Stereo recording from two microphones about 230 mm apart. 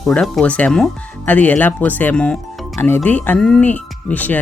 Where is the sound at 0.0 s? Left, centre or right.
Centre.